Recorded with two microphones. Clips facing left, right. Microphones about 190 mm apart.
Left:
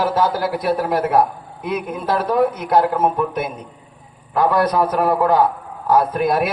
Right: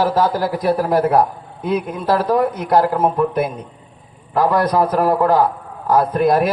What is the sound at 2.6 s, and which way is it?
Speech, centre (ahead or behind).